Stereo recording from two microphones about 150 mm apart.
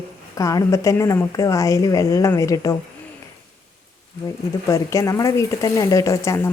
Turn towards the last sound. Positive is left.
turn(degrees=20)  # may be behind; listen again after turning